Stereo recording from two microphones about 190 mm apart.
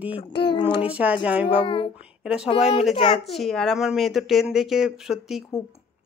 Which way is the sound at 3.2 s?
Centre (ahead or behind).